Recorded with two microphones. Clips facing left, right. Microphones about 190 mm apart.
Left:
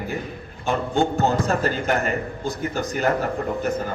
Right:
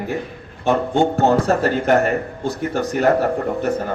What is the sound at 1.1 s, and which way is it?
Speech, 70° right (ahead or behind).